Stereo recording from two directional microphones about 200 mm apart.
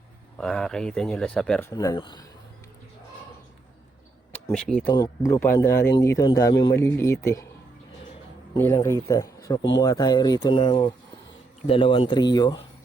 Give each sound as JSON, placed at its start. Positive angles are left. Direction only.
{"t": 0.3, "sound": "speech", "side_deg": 5}
{"t": 1.7, "sound": "speech", "side_deg": 15}
{"t": 4.5, "sound": "speech", "side_deg": 5}
{"t": 4.9, "sound": "speech", "side_deg": 15}
{"t": 6.8, "sound": "speech", "side_deg": 10}
{"t": 8.5, "sound": "speech", "side_deg": 15}